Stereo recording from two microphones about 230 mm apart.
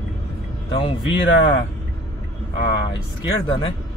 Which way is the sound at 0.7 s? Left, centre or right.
Left.